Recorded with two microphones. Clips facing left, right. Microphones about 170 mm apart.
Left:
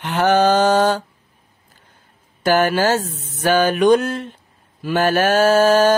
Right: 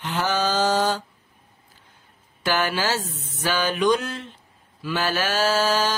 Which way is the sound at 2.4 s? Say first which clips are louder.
Left 8 dB; 50° left (ahead or behind).